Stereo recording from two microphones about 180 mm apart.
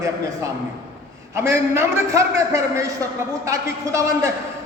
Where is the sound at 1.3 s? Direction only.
15° right (ahead or behind).